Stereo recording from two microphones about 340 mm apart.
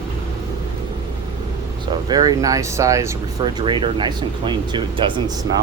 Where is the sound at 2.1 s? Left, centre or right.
Centre.